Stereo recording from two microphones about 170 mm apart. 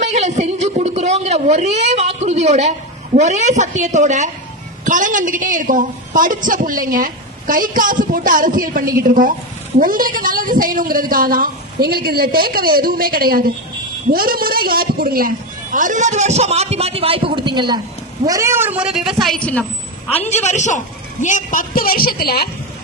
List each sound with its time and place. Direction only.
0.0 s a sound: 40° right (ahead or behind)
3.2 s a woman's voice: 45° right (ahead or behind); by 19.6 s 10° left (ahead or behind)
20.1 s a woman's voice: 40° left (ahead or behind); by 22.4 s 65° left (ahead or behind)